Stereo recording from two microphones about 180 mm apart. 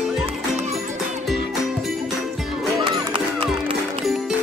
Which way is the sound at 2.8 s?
30° right (ahead or behind).